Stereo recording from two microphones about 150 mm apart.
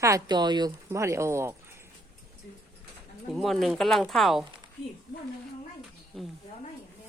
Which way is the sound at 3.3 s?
Centre (ahead or behind).